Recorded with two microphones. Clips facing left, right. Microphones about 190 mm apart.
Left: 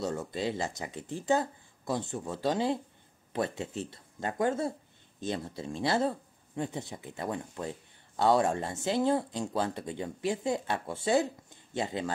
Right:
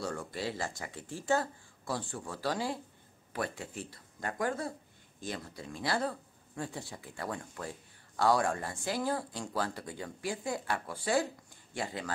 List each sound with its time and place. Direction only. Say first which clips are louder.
0.0 s speech: left 4 dB; 20° left (ahead or behind)